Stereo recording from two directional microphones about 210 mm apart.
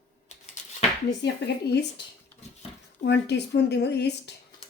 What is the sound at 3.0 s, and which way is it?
Speech, 55° left (ahead or behind).